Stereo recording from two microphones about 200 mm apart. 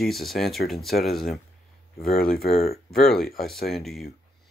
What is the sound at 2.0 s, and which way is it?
Speech, 45° left (ahead or behind).